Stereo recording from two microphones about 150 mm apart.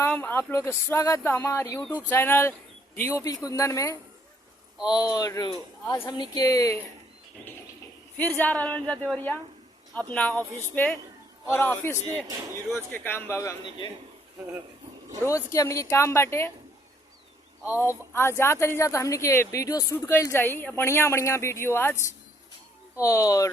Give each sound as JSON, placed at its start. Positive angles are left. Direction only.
{"t": 0.1, "sound": "speech", "side_deg": 10}
{"t": 7.4, "sound": "a sound", "side_deg": 5}
{"t": 8.1, "sound": "speech", "side_deg": 10}
{"t": 12.3, "sound": "speech", "side_deg": -20}
{"t": 12.9, "sound": "speech", "side_deg": 15}
{"t": 15.2, "sound": "speech", "side_deg": 20}
{"t": 17.7, "sound": "speech", "side_deg": 15}
{"t": 23.0, "sound": "speech", "side_deg": 20}